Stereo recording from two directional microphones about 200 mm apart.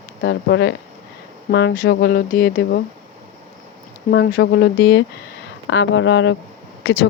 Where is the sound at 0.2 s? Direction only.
60° left (ahead or behind).